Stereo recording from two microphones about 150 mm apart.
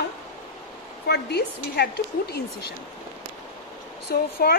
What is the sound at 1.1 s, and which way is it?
Speech, 90° left.